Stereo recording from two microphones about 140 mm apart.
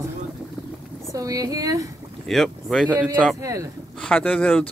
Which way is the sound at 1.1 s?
25° right (ahead or behind).